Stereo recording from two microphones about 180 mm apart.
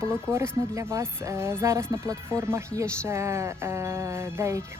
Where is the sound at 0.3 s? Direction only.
15° right (ahead or behind).